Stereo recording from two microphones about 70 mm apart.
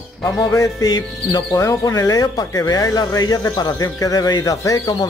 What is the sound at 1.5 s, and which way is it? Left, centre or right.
Speech, left.